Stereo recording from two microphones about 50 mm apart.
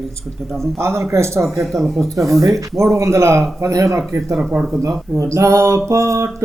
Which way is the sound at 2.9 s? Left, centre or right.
Right.